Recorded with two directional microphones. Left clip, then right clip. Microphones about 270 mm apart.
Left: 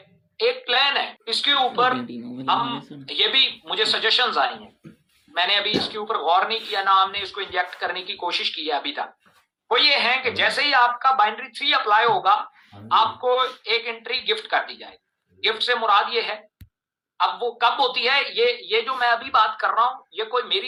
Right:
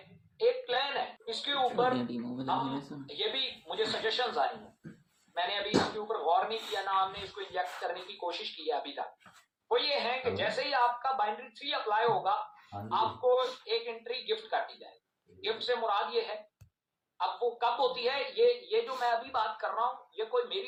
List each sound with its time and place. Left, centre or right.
0.3 s a sound: left
2.0 s a man's voice: centre
3.1 s a man's voice: left